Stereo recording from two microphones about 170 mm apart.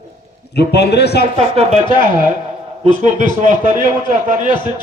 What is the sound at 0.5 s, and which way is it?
Speech, 75° left (ahead or behind).